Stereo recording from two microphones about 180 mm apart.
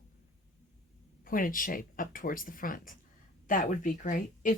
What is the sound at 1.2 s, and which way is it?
Speech, 50° left (ahead or behind).